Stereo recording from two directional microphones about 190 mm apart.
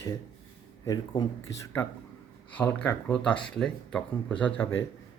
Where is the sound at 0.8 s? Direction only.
20° left (ahead or behind).